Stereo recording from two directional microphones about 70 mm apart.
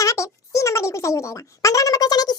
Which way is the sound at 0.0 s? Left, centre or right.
Left.